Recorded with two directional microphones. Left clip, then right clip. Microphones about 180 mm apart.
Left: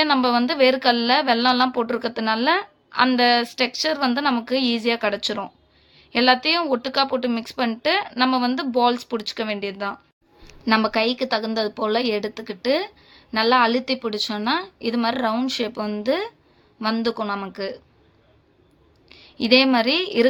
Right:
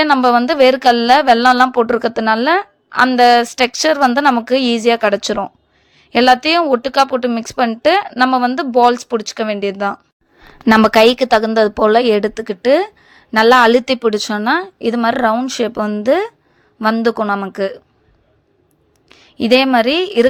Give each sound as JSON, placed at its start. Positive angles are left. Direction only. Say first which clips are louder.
{"t": 0.0, "sound": "a woman's voice", "louder": "right 8 dB", "side_deg": -40}
{"t": 10.7, "sound": "a woman's voice", "louder": "right 11 dB", "side_deg": -55}
{"t": 19.0, "sound": "a woman's voice", "louder": "right 6 dB", "side_deg": -40}